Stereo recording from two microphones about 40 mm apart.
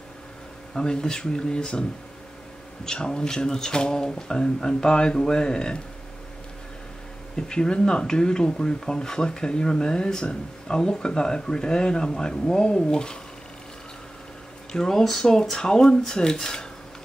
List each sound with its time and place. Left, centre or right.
0.7 s speech: centre
7.3 s speech: centre
14.7 s speech: centre